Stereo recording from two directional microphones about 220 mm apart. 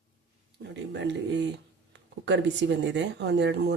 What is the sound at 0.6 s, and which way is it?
Speech, 55° right (ahead or behind).